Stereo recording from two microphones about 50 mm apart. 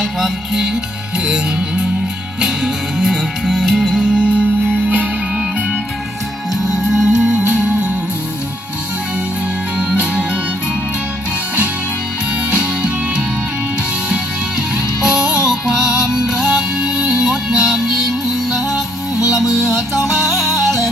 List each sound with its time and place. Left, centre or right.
0.2 s music: centre; by 4.4 s right
6.5 s music: centre
9.7 s music: right
12.5 s music: right
15.0 s music: centre